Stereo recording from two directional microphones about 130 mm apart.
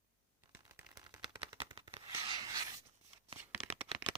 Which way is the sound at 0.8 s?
30° right (ahead or behind).